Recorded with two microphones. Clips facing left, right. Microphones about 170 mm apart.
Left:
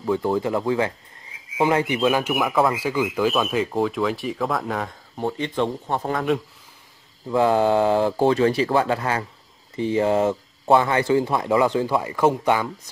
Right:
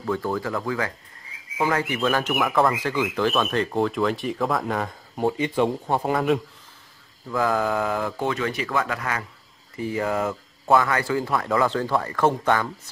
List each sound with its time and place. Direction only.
0.0 s speech: 20° left (ahead or behind)
2.3 s a man's voice: 5° left (ahead or behind)
7.2 s speech: 25° left (ahead or behind)